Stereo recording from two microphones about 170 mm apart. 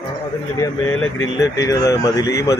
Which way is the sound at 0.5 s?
20° left (ahead or behind).